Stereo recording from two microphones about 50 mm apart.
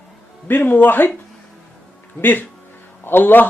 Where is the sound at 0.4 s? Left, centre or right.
Left.